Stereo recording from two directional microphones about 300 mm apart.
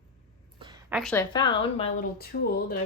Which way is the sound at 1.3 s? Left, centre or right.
Centre.